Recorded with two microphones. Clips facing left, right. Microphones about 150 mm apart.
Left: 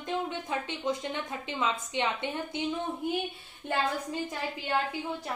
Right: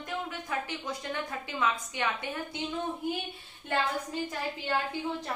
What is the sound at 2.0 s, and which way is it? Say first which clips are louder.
Speech: left 4 dB; 20° left (ahead or behind).